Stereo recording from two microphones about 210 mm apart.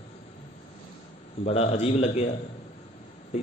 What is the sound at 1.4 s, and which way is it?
Speech, 30° left (ahead or behind).